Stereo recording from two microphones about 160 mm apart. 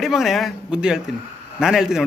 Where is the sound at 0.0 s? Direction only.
Centre (ahead or behind).